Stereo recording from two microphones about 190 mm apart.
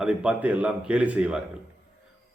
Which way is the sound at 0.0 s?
5° right (ahead or behind).